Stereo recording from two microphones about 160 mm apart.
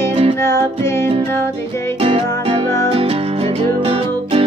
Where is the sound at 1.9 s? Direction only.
35° right (ahead or behind).